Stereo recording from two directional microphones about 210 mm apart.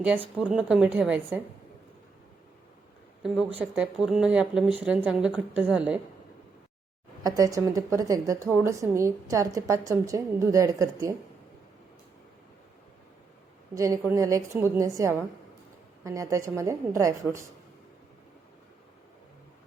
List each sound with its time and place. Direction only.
0.3 s speech: 5° right (ahead or behind)
3.6 s a woman's voice: 5° right (ahead or behind)
7.3 s a woman's voice: 15° right (ahead or behind)
13.7 s a woman's voice: 15° right (ahead or behind)